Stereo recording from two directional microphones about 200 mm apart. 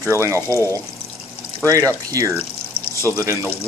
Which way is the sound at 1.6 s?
15° right (ahead or behind).